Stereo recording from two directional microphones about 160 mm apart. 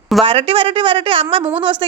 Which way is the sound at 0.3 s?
35° right (ahead or behind).